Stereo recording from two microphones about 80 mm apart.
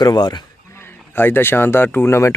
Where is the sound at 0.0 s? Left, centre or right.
Left.